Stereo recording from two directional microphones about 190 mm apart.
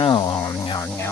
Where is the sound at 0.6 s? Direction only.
25° left (ahead or behind).